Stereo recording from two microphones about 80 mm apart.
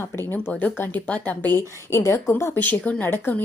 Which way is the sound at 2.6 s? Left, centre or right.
Left.